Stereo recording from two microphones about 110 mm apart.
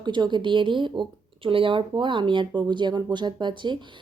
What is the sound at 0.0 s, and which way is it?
Speech, 45° right (ahead or behind).